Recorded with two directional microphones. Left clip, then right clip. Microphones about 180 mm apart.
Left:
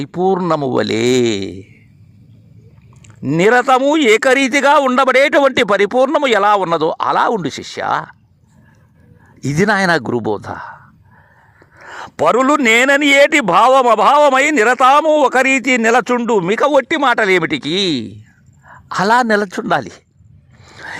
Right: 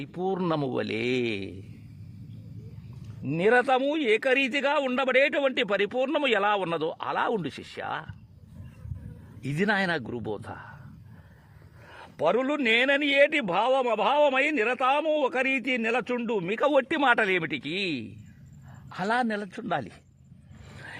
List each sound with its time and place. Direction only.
0.0 s a man's voice: 45° left (ahead or behind)
3.2 s a man's voice: 50° left (ahead or behind)
9.4 s a man's voice: 40° left (ahead or behind)
11.9 s a man's voice: 55° left (ahead or behind)
20.7 s a sound: 35° left (ahead or behind)